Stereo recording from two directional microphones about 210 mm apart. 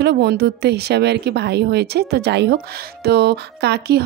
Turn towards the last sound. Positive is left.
turn(degrees=-50)  # may be behind; listen again after turning